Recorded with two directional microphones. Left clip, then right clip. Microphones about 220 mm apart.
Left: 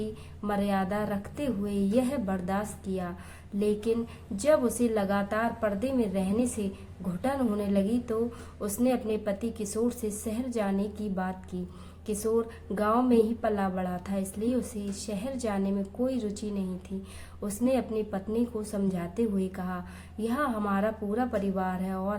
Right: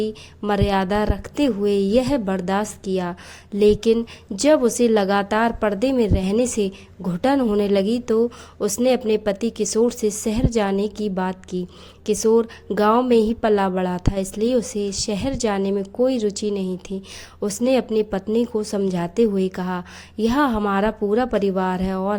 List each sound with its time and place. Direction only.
0.0 s a woman's voice: 40° right (ahead or behind)